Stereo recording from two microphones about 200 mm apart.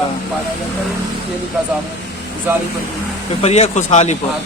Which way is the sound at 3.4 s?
30° left (ahead or behind).